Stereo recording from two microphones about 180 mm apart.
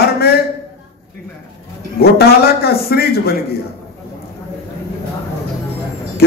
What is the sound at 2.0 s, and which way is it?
Speech, 60° left (ahead or behind).